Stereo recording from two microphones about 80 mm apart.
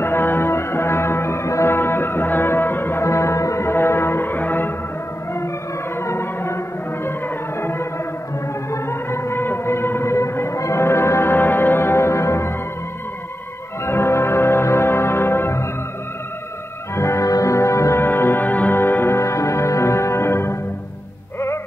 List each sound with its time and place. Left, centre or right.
0.0 s music: left
5.9 s music: left
13.8 s music: left
16.9 s music: left